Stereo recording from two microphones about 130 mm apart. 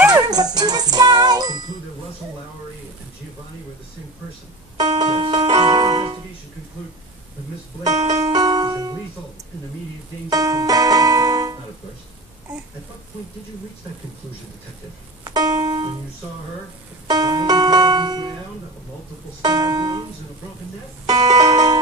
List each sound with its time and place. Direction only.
0.3 s music: 30° right (ahead or behind)
4.7 s music: 35° right (ahead or behind)
5.5 s keyboard: 40° right (ahead or behind)
7.8 s music: 60° right (ahead or behind)
8.3 s music: 30° right (ahead or behind)
10.3 s music: 30° right (ahead or behind)
15.2 s music: 30° right (ahead or behind)
17.1 s music: 30° right (ahead or behind)
19.4 s music: 30° right (ahead or behind)
21.0 s music: 30° right (ahead or behind)